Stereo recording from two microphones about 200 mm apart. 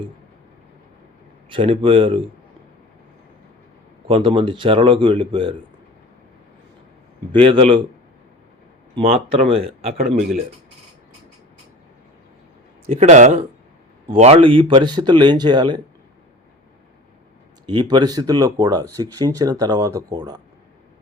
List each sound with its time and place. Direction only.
1.5 s speech: 25° right (ahead or behind)
4.0 s speech: 25° right (ahead or behind)
7.3 s speech: 25° right (ahead or behind)
9.0 s speech: 30° right (ahead or behind)
12.9 s speech: 35° right (ahead or behind)
17.7 s speech: 25° right (ahead or behind)